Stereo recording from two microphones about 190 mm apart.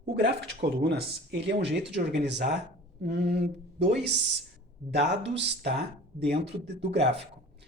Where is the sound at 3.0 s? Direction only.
60° right (ahead or behind).